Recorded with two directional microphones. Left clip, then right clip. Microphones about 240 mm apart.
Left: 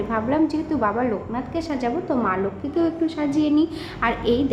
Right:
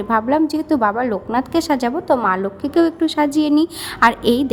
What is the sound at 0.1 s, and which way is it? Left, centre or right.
A woman's voice, right.